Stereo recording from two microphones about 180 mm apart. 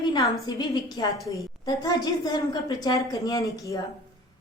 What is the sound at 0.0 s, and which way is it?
A woman's voice, 25° left (ahead or behind).